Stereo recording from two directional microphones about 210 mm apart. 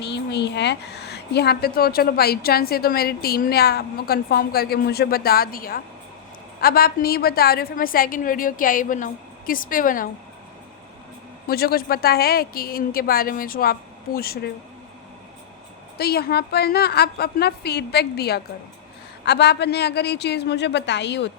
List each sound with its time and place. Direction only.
0.0 s a woman's voice: 55° left (ahead or behind)
11.4 s a woman's voice: 45° left (ahead or behind)
16.0 s a woman's voice: 50° left (ahead or behind)